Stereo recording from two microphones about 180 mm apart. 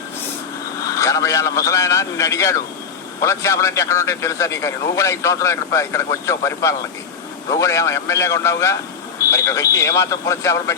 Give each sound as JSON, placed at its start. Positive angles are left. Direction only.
{"t": 0.9, "sound": "a man's voice", "side_deg": 20}